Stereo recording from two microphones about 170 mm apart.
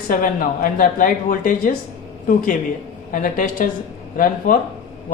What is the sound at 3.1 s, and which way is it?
A woman's voice, 50° left (ahead or behind).